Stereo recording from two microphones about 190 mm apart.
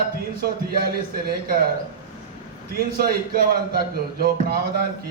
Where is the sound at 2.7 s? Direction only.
50° right (ahead or behind).